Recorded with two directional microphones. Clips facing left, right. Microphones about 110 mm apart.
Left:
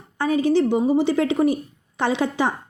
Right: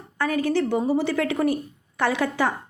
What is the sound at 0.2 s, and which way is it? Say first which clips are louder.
Speech: left 4 dB; 20° left (ahead or behind).